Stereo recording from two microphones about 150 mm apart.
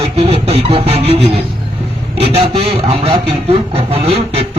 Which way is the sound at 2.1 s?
40° right (ahead or behind).